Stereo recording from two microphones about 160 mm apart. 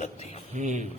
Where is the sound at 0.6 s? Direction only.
50° right (ahead or behind).